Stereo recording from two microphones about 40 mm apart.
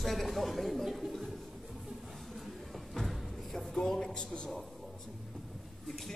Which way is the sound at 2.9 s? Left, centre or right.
Centre.